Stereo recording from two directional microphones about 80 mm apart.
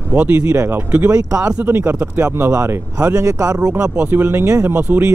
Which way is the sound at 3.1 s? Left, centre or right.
Right.